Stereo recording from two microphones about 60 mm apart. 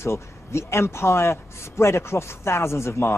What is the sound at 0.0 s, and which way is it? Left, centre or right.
Speech, left.